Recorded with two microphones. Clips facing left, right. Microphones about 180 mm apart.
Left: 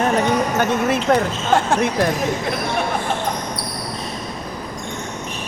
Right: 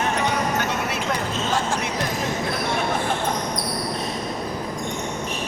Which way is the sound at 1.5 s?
60° left (ahead or behind).